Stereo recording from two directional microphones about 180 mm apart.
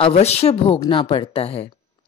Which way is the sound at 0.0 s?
35° left (ahead or behind).